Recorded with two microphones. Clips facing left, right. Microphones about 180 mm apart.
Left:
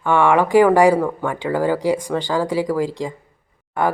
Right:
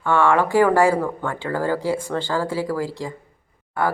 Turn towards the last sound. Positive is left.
turn(degrees=20)  # may be behind; listen again after turning